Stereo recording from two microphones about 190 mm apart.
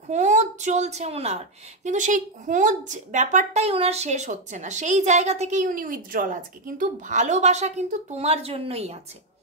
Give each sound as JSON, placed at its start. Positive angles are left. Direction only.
{"t": 0.1, "sound": "a child's voice", "side_deg": -40}